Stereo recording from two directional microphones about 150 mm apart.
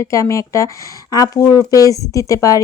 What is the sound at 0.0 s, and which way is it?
Speech, 20° left (ahead or behind).